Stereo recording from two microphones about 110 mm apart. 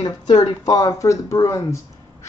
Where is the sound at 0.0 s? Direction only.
35° left (ahead or behind).